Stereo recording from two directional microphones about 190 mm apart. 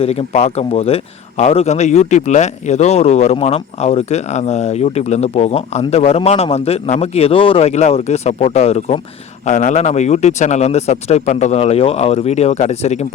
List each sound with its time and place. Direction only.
0.0 s a man's voice: 30° left (ahead or behind)